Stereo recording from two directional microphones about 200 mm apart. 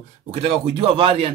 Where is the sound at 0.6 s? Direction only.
30° right (ahead or behind).